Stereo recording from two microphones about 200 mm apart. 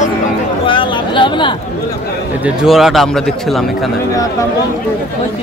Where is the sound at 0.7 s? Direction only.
25° left (ahead or behind).